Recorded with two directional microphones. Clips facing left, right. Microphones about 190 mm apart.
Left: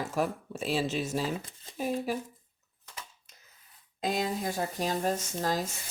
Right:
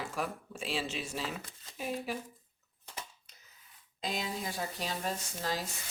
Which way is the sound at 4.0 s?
50° left (ahead or behind).